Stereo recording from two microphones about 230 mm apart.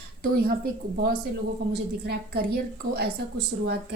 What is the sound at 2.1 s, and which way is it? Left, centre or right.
A woman's voice, right.